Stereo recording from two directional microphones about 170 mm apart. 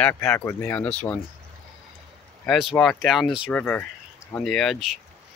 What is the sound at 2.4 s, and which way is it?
Speech, centre (ahead or behind).